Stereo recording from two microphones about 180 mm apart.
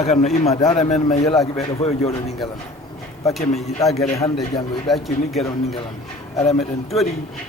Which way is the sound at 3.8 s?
20° left (ahead or behind).